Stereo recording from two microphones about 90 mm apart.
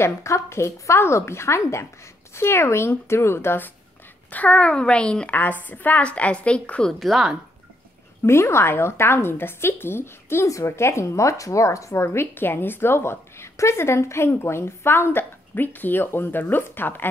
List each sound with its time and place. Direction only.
0.0 s a woman's voice: 30° left (ahead or behind); by 6.9 s 15° left (ahead or behind)
6.9 s a woman's voice: centre (ahead or behind)
8.2 s a woman's voice: 30° left (ahead or behind)